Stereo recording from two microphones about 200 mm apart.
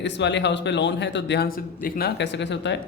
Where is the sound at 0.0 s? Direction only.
60° left (ahead or behind).